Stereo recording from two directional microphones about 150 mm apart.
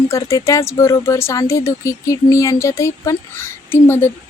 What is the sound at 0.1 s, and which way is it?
Speech, 20° left (ahead or behind).